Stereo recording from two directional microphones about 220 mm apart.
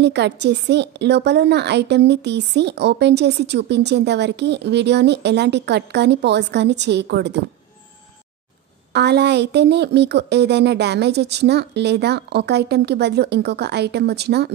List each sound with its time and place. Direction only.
0.0 s a woman's voice: 50° right (ahead or behind)
8.9 s a woman's voice: 50° right (ahead or behind)